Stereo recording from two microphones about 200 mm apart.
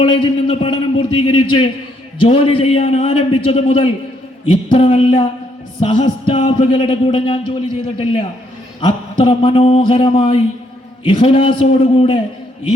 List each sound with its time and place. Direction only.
0.0 s speech: 25° left (ahead or behind)